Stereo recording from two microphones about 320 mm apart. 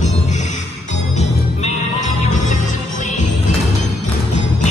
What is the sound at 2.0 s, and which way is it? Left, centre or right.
Music, left.